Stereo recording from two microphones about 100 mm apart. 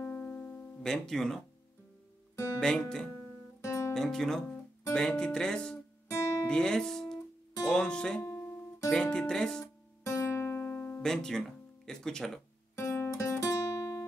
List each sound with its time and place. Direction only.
0.0 s music: 15° left (ahead or behind)
0.8 s speech: 5° left (ahead or behind)
2.6 s music: 5° left (ahead or behind)
3.6 s guitar: 30° left (ahead or behind)
3.9 s speech: 5° left (ahead or behind)
4.9 s music: 10° left (ahead or behind)
6.0 s guitar: 30° left (ahead or behind)
6.4 s music: 10° left (ahead or behind)
10.0 s music: 30° left (ahead or behind)
11.0 s speech: 5° left (ahead or behind)
12.7 s music: 25° left (ahead or behind)